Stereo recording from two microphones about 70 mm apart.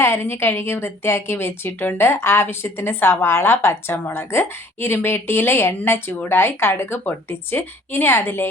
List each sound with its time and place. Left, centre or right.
0.0 s a woman's voice: left